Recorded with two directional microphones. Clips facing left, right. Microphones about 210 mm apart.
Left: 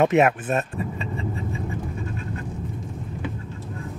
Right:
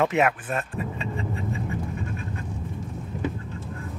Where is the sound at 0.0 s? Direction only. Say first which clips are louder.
Left 4 dB; 25° left (ahead or behind).